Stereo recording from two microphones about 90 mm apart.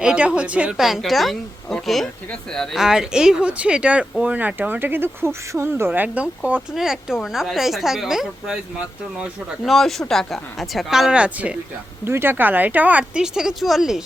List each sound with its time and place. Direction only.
0.0 s speech: 10° right (ahead or behind); by 2.6 s 5° left (ahead or behind)
2.7 s speech: 5° right (ahead or behind)
6.7 s speech: 5° right (ahead or behind)
10.1 s speech: 5° left (ahead or behind)
11.1 s speech: 15° right (ahead or behind)
12.0 s speech: 25° right (ahead or behind); by 14.0 s 5° right (ahead or behind)